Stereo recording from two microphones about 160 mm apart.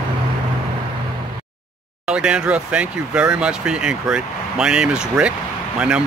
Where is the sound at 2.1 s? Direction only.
5° right (ahead or behind).